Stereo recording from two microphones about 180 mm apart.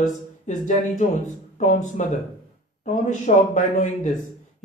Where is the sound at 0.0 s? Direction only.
45° left (ahead or behind).